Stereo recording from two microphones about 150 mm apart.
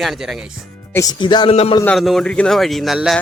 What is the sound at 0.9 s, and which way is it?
Speech, 25° left (ahead or behind).